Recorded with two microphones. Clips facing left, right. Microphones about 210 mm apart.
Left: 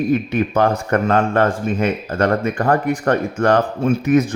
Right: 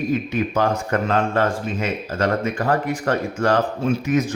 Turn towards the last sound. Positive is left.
turn(degrees=55)  # may be behind; listen again after turning